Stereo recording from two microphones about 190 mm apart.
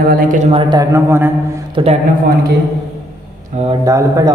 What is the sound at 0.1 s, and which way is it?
Speech, 45° right (ahead or behind).